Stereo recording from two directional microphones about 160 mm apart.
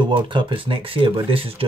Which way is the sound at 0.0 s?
30° right (ahead or behind).